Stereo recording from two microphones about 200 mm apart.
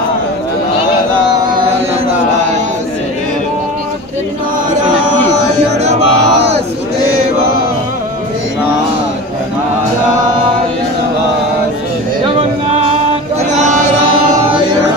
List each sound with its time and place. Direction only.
5.8 s chant: 35° right (ahead or behind)